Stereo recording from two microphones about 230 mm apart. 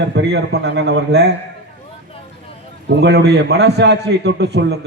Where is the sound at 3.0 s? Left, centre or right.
Right.